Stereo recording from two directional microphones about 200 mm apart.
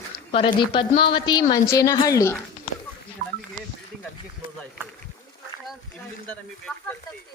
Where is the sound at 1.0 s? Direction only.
25° left (ahead or behind).